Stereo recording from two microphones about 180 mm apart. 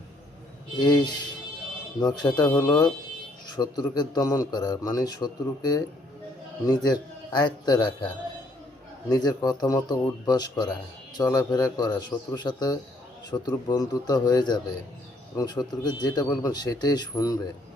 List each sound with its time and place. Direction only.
0.8 s a man's voice: 20° left (ahead or behind)